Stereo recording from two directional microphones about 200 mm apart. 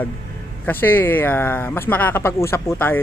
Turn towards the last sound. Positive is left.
turn(degrees=10)  # may be behind; listen again after turning